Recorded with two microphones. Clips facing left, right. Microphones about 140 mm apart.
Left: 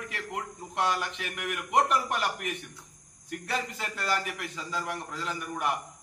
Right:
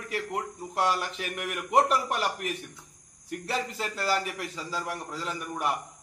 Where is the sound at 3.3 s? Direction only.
30° right (ahead or behind).